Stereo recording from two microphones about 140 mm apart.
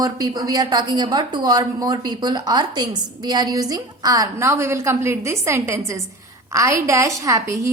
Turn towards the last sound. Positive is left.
turn(degrees=-20)  # may be behind; listen again after turning